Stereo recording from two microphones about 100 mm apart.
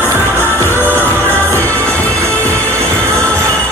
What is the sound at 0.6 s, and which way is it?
Music, 20° left (ahead or behind).